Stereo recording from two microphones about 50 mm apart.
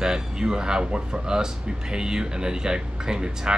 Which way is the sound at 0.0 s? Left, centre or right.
Centre.